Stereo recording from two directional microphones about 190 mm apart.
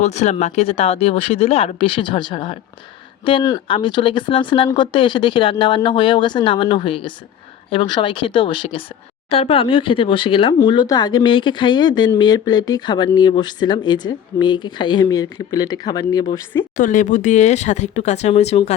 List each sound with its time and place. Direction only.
0.0 s speech: 35° left (ahead or behind); by 16.6 s 20° left (ahead or behind)
16.7 s speech: 45° left (ahead or behind)